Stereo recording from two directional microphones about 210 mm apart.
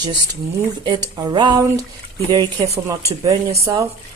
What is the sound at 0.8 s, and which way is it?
Speech, 20° right (ahead or behind).